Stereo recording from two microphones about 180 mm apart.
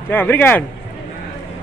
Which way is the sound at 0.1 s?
10° left (ahead or behind).